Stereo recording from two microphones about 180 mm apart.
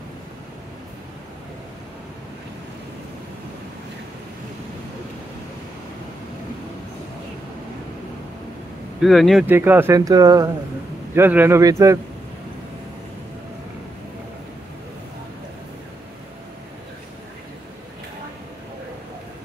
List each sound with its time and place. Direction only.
9.0 s speech: centre (ahead or behind)
9.5 s a man's voice: 10° right (ahead or behind)